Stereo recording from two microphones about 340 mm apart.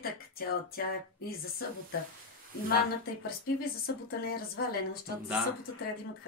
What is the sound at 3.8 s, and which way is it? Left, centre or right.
Speech, left.